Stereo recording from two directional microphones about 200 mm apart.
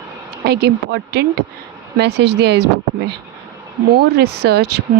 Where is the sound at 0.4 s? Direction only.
55° right (ahead or behind).